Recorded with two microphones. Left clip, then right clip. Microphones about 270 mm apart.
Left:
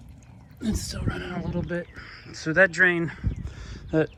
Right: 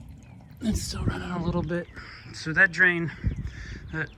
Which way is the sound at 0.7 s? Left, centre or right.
Centre.